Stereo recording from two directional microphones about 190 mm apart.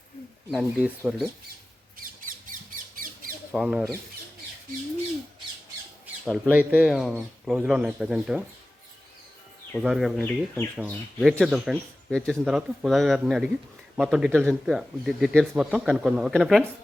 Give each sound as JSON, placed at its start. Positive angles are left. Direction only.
{"t": 0.5, "sound": "speech", "side_deg": 5}
{"t": 2.0, "sound": "squawk", "side_deg": -45}
{"t": 3.5, "sound": "speech", "side_deg": 0}
{"t": 6.2, "sound": "speech", "side_deg": -5}
{"t": 9.7, "sound": "speech", "side_deg": 0}
{"t": 10.8, "sound": "speech", "side_deg": -5}